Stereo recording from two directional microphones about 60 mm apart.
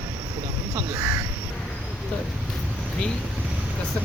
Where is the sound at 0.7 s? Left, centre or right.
Right.